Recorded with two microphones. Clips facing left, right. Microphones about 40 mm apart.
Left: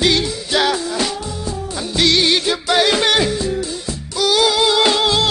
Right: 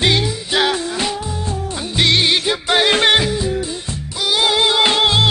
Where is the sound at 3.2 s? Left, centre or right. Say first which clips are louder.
Even; centre.